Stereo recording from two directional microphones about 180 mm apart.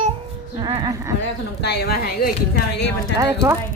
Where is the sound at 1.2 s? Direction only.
65° left (ahead or behind).